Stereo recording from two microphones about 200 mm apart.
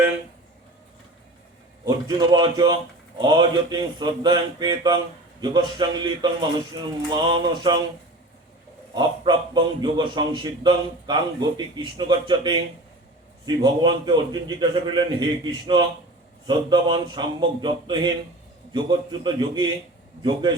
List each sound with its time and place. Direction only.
1.8 s a man's voice: 20° right (ahead or behind)
7.1 s a man's voice: 20° right (ahead or behind)
9.0 s a man's voice: 20° right (ahead or behind)